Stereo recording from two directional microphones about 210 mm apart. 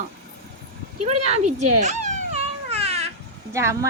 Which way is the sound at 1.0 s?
30° right (ahead or behind).